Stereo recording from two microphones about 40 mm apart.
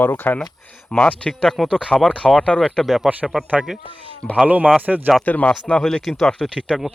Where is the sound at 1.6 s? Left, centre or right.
Centre.